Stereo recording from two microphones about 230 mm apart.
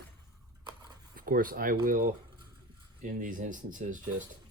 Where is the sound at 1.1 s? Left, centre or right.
Right.